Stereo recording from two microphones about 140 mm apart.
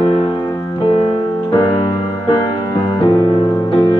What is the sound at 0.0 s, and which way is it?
Music, 35° left (ahead or behind).